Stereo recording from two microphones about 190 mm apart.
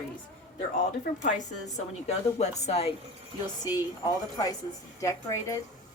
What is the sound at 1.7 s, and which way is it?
A woman's voice, 35° left (ahead or behind).